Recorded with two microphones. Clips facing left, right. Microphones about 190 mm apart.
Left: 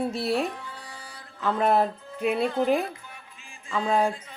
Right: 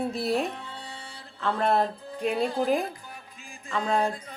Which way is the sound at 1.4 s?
5° left (ahead or behind).